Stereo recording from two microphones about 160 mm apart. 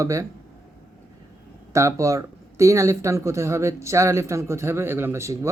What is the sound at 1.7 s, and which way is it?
Speech, 20° right (ahead or behind).